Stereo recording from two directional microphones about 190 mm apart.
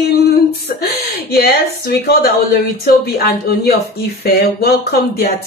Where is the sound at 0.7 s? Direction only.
55° left (ahead or behind).